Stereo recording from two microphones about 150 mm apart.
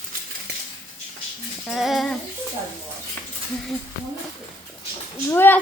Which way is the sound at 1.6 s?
Centre (ahead or behind).